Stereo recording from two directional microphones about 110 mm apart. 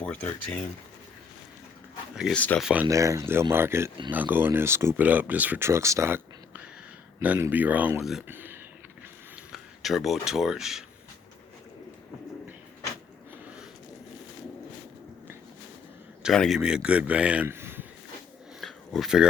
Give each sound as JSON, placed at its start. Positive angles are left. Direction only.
{"t": 0.0, "sound": "speech", "side_deg": 10}
{"t": 2.3, "sound": "speech", "side_deg": 15}
{"t": 2.6, "sound": "speech", "side_deg": -5}
{"t": 2.8, "sound": "speech", "side_deg": -30}
{"t": 9.5, "sound": "speech", "side_deg": 0}
{"t": 16.3, "sound": "speech", "side_deg": 5}
{"t": 16.6, "sound": "speech", "side_deg": -10}
{"t": 18.6, "sound": "a sound", "side_deg": 0}